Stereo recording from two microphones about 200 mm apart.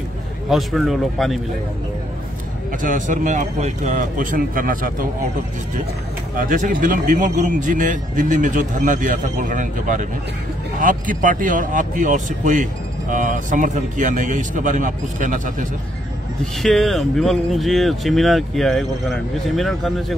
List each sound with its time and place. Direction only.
0.5 s speech: centre (ahead or behind)
2.8 s speech: 40° right (ahead or behind)
6.3 s speech: 40° right (ahead or behind)
16.6 s speech: centre (ahead or behind)